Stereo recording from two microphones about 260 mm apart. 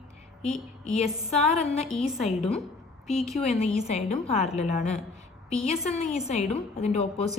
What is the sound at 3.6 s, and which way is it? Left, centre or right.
A woman's voice, left.